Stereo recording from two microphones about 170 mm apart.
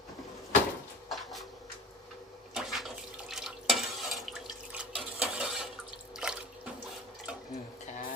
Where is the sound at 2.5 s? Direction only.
Centre (ahead or behind).